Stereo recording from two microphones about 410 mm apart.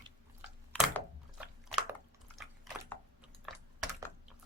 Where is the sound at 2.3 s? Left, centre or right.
Centre.